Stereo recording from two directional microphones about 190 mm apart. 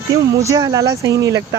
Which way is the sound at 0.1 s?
15° right (ahead or behind).